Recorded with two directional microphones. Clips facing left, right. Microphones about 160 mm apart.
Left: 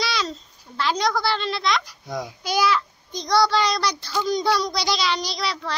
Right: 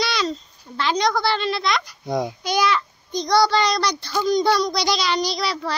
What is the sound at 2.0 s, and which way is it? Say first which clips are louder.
Speech: right 7 dB; 60° right (ahead or behind).